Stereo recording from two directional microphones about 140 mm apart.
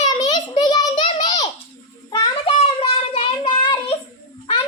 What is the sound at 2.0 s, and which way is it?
Child singing, 30° left (ahead or behind).